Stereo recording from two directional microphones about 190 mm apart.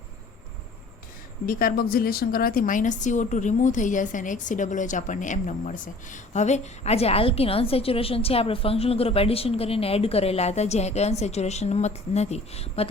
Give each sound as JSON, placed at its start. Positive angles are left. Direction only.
{"t": 1.5, "sound": "a woman's voice", "side_deg": 50}